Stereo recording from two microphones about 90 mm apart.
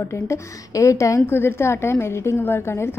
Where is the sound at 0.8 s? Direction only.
35° left (ahead or behind).